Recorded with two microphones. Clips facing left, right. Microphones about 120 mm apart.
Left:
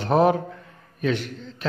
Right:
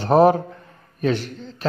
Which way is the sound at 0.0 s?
35° right (ahead or behind).